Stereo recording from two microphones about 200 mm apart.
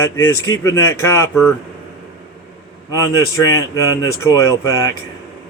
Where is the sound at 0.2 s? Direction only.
15° left (ahead or behind).